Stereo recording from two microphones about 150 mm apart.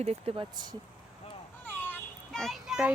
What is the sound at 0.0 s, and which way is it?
Speech, 45° right (ahead or behind).